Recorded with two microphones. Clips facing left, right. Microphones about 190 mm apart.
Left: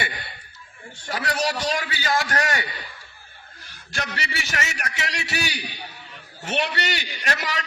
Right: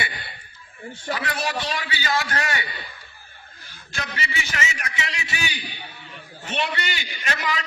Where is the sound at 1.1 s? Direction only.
40° left (ahead or behind).